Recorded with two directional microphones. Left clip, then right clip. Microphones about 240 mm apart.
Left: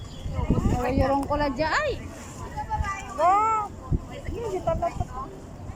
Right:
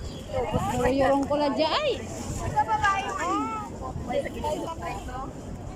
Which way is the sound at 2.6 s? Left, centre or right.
Right.